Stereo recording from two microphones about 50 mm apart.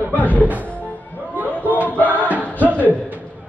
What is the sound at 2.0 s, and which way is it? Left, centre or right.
Music, right.